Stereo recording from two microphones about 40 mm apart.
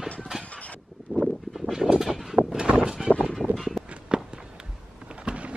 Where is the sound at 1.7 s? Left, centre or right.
Centre.